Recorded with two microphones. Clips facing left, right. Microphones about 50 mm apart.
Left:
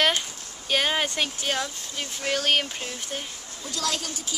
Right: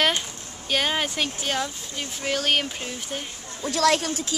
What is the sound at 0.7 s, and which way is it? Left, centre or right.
Speech, centre.